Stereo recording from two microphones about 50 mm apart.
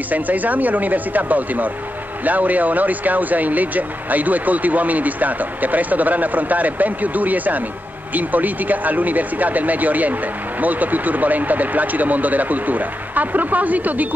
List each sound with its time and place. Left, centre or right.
0.1 s speech: right